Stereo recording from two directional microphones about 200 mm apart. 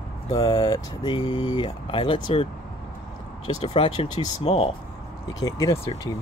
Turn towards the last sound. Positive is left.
turn(degrees=20)  # may be behind; listen again after turning